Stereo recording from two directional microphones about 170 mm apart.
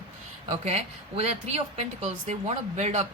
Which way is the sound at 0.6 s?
35° right (ahead or behind).